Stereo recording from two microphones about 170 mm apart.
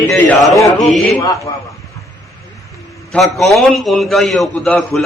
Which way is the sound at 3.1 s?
Centre (ahead or behind).